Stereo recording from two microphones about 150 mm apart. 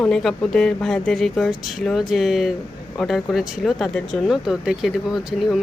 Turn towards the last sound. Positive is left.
turn(degrees=0)  # may be behind; listen again after turning